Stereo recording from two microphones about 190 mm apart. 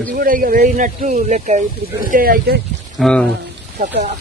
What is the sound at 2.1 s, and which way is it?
Speech, 50° right (ahead or behind).